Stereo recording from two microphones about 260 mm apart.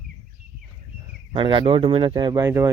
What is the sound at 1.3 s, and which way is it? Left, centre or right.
Speech, centre.